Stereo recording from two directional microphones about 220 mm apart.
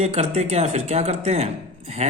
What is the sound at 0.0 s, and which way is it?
Speech, 30° right (ahead or behind).